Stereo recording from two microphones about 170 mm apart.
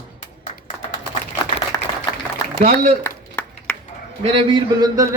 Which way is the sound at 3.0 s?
10° left (ahead or behind).